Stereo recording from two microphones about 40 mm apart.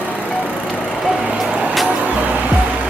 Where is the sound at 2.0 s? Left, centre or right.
Right.